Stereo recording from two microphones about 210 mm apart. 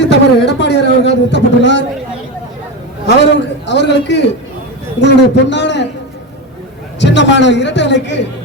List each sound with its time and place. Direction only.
0.1 s a sound: 55° left (ahead or behind)
3.7 s a man's voice: 55° left (ahead or behind)
7.0 s a man's voice: 55° left (ahead or behind)